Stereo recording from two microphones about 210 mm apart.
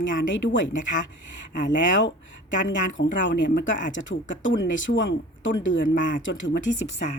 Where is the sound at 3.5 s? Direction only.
40° left (ahead or behind).